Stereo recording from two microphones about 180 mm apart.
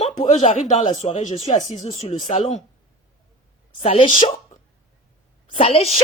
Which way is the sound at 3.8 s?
30° left (ahead or behind).